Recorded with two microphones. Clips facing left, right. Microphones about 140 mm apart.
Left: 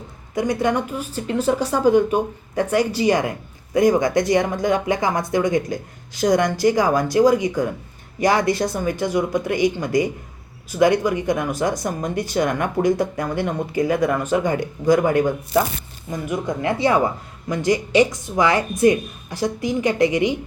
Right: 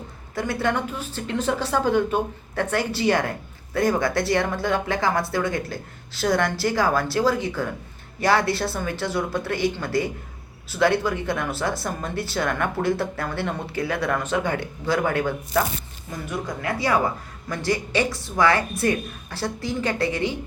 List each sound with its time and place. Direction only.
0.3 s a woman's voice: 15° left (ahead or behind)